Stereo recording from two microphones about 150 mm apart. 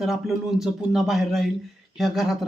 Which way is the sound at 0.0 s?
Centre (ahead or behind).